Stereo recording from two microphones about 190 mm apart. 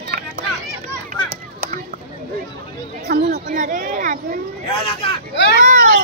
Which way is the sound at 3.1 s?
50° right (ahead or behind).